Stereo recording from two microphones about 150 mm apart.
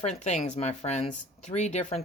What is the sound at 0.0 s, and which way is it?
Speech, 50° left (ahead or behind).